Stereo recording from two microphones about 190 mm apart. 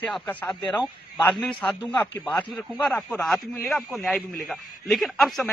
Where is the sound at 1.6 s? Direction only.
5° left (ahead or behind).